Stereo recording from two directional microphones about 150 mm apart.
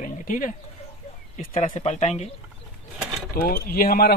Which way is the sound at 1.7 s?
45° left (ahead or behind).